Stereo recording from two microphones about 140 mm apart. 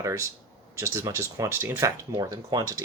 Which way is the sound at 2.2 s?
30° right (ahead or behind).